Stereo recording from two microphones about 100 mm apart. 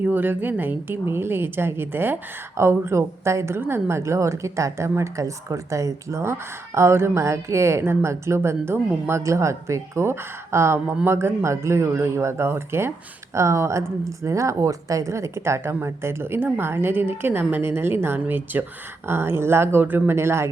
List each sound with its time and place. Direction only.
0.0 s speech: 20° right (ahead or behind)